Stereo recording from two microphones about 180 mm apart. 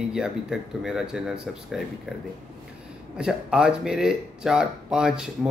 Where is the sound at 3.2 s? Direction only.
5° right (ahead or behind).